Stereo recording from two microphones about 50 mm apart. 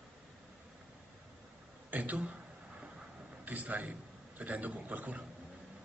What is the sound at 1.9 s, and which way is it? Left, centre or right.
Speech, right.